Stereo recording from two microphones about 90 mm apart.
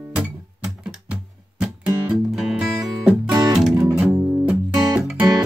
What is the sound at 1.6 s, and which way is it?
Music, 10° right (ahead or behind).